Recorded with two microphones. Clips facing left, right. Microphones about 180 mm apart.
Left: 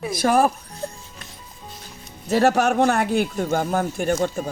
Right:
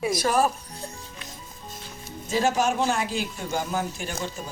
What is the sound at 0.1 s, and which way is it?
Speech, 55° left (ahead or behind).